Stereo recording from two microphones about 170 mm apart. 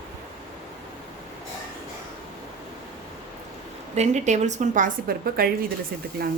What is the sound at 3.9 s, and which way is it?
A woman's voice, 40° right (ahead or behind).